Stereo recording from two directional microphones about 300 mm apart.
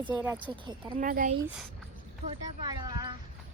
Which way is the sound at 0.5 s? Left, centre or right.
Right.